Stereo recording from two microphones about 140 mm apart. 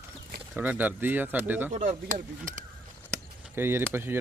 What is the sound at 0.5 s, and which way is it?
Speech, 10° right (ahead or behind).